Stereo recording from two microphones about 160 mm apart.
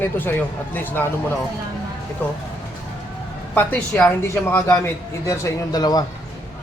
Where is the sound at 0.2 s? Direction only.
10° left (ahead or behind).